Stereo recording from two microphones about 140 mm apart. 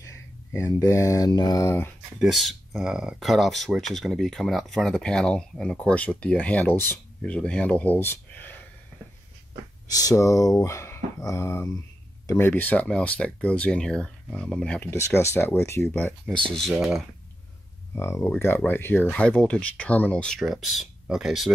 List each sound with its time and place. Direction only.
0.0 s speech: 20° left (ahead or behind)
2.1 s speech: centre (ahead or behind)
9.8 s speech: 25° left (ahead or behind); by 14.9 s 5° left (ahead or behind)
14.9 s speech: 20° left (ahead or behind)
16.5 s speech: centre (ahead or behind)
17.9 s speech: 20° left (ahead or behind); by 21.5 s 5° right (ahead or behind)